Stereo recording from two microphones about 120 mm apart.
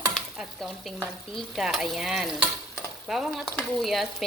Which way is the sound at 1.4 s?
Centre (ahead or behind).